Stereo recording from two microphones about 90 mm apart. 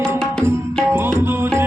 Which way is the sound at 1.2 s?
25° right (ahead or behind).